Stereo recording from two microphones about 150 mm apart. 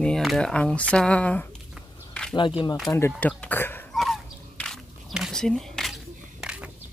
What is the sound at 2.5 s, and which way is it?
Speech, 35° left (ahead or behind).